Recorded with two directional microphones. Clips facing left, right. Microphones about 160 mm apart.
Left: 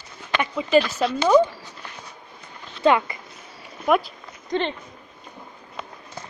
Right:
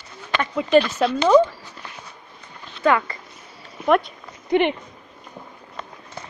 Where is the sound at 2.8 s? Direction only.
20° left (ahead or behind).